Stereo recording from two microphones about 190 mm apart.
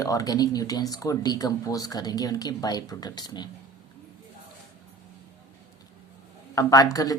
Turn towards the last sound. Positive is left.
turn(degrees=20)  # may be behind; listen again after turning